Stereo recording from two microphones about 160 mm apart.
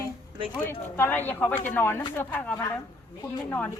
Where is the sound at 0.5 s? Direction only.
15° left (ahead or behind).